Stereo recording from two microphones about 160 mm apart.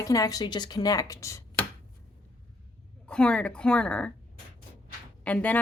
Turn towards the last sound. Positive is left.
turn(degrees=10)  # may be behind; listen again after turning